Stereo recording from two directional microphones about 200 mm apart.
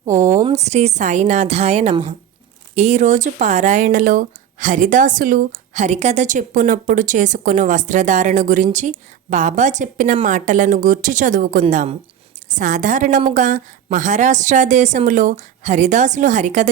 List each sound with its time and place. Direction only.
0.0 s a woman's voice: 35° right (ahead or behind)